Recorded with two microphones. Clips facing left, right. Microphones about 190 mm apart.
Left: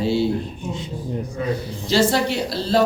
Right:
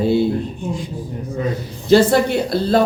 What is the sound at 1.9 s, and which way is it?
Speech, 50° right (ahead or behind).